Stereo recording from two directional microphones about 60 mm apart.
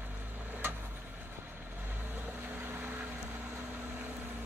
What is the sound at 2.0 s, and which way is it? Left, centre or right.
Vehicle, right.